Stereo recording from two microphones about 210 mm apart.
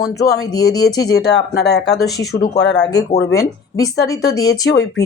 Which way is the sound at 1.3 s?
50° left (ahead or behind).